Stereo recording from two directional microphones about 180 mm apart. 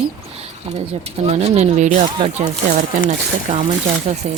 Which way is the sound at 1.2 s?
35° right (ahead or behind).